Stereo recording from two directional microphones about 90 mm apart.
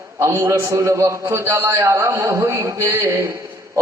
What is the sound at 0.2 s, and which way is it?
A man's voice, 30° right (ahead or behind).